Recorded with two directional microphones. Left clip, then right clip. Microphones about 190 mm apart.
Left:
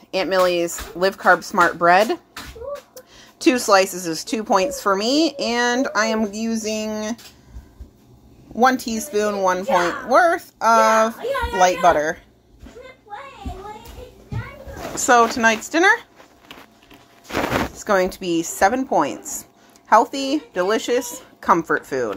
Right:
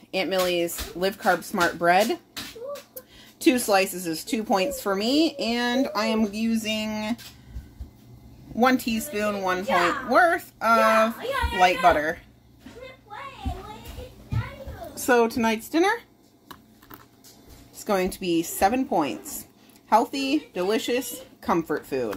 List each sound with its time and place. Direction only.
0.1 s speech: 15° left (ahead or behind)
8.9 s a child's voice: 25° left (ahead or behind)
15.0 s speech: 10° left (ahead or behind)
17.8 s speech: 5° left (ahead or behind)